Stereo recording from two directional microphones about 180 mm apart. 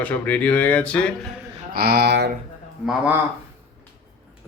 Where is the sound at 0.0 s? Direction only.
5° left (ahead or behind).